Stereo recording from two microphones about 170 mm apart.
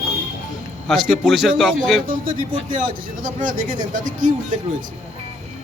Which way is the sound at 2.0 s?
55° right (ahead or behind).